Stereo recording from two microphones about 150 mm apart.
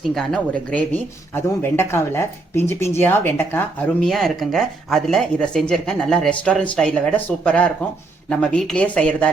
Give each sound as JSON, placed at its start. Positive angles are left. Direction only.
{"t": 0.1, "sound": "speech", "side_deg": 0}
{"t": 4.0, "sound": "speech", "side_deg": 0}